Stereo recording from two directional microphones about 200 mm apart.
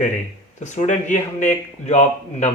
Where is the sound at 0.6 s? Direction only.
35° left (ahead or behind).